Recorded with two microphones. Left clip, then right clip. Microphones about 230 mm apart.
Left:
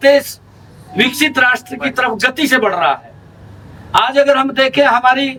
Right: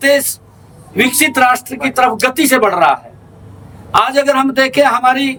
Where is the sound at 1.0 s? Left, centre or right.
Centre.